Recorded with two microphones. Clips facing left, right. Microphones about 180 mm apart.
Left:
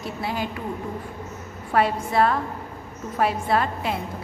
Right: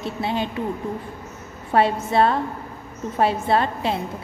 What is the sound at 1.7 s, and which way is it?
A woman's voice, 25° right (ahead or behind).